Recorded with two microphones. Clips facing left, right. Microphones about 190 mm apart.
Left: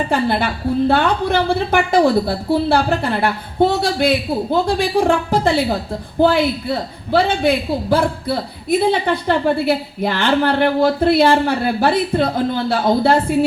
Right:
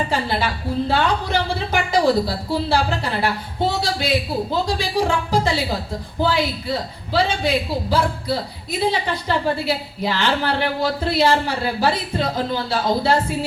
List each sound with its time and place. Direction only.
0.1 s a man's voice: 55° left (ahead or behind)